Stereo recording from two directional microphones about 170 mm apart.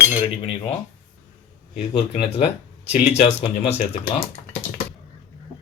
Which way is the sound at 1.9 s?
35° left (ahead or behind).